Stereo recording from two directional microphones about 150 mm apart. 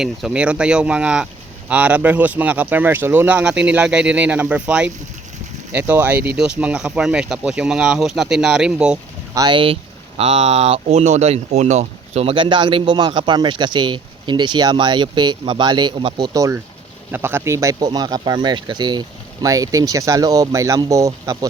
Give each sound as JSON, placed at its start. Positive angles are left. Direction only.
{"t": 0.0, "sound": "speech", "side_deg": -5}
{"t": 9.3, "sound": "speech", "side_deg": -30}
{"t": 10.2, "sound": "speech", "side_deg": -45}